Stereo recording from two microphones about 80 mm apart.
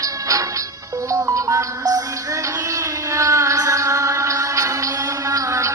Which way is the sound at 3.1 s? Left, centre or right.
Right.